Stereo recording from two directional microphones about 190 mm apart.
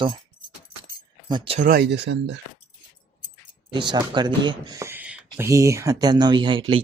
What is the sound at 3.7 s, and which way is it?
Speech, 25° right (ahead or behind).